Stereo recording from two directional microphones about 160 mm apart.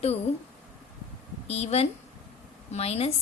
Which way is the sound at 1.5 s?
40° left (ahead or behind).